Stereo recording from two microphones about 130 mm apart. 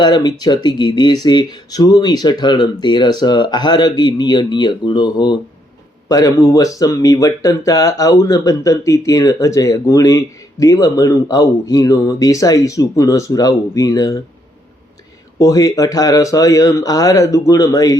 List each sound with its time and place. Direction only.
0.0 s speech: 35° left (ahead or behind)
15.4 s speech: 25° left (ahead or behind)